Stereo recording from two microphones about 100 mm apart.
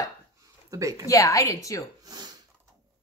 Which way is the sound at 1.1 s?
35° left (ahead or behind).